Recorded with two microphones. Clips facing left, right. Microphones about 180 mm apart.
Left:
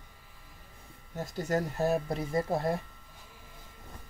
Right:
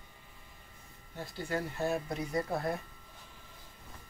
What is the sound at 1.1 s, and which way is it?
Speech, 45° left (ahead or behind).